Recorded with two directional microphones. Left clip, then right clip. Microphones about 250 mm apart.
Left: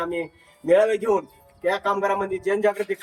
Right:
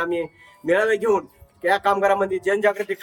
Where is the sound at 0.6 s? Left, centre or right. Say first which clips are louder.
Left 1 dB; centre.